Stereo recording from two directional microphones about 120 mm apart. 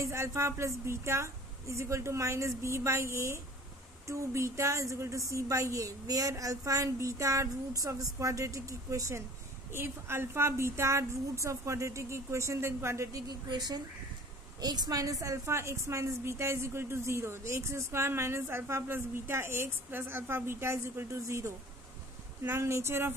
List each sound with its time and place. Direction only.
0.0 s a woman's voice: 25° right (ahead or behind)